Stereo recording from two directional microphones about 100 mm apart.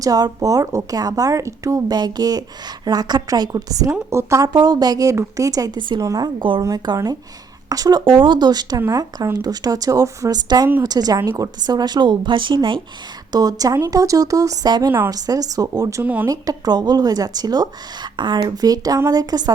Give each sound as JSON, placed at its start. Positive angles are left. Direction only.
{"t": 0.0, "sound": "a woman's voice", "side_deg": -40}
{"t": 4.5, "sound": "a woman's voice", "side_deg": -45}
{"t": 6.6, "sound": "a woman's voice", "side_deg": -35}
{"t": 13.3, "sound": "a woman's voice", "side_deg": -40}
{"t": 18.4, "sound": "a woman's voice", "side_deg": -40}